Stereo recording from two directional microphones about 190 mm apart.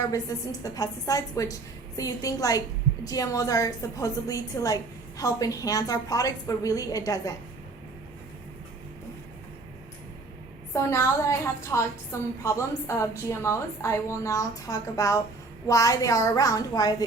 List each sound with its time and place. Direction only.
0.6 s a woman's voice: 20° left (ahead or behind)
10.8 s a woman's voice: 15° left (ahead or behind)